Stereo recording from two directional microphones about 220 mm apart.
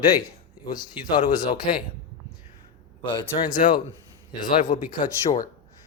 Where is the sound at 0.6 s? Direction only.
20° left (ahead or behind).